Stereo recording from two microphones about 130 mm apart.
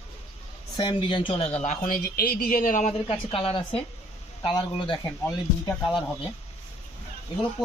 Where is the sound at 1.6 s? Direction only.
80° left.